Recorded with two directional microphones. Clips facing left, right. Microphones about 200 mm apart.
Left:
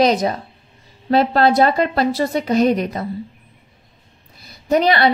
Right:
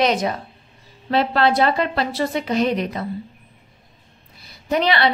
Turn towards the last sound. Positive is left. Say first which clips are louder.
# left 4 dB
turn(degrees=40)  # may be behind; listen again after turning